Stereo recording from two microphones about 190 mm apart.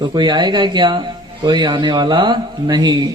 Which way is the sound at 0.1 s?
25° right (ahead or behind).